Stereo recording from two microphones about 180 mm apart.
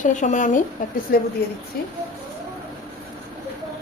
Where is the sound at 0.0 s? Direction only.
45° left (ahead or behind).